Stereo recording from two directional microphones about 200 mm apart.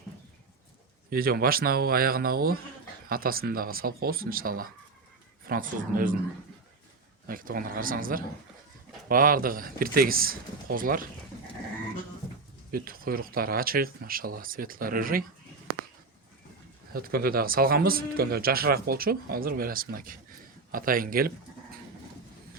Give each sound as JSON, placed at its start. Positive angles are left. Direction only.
{"t": 1.1, "sound": "speech", "side_deg": -45}
{"t": 7.3, "sound": "speech", "side_deg": -45}
{"t": 12.7, "sound": "speech", "side_deg": -45}
{"t": 16.9, "sound": "speech", "side_deg": -50}